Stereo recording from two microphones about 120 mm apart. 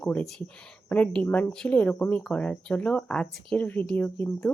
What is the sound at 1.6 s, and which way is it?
Speech, 10° left (ahead or behind).